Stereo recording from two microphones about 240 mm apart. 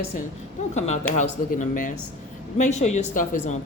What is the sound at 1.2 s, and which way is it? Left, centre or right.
Speech, left.